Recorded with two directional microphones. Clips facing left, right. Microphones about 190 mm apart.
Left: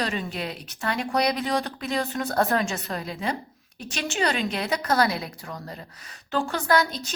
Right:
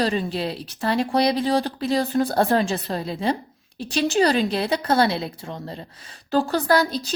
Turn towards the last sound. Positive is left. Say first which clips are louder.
# right 3 dB
turn(degrees=-35)  # may be behind; listen again after turning